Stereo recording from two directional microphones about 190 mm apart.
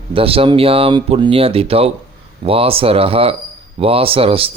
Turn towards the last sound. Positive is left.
turn(degrees=-30)  # may be behind; listen again after turning